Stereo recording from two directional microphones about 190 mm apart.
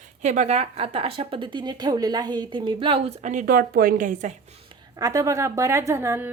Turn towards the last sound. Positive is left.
turn(degrees=-10)  # may be behind; listen again after turning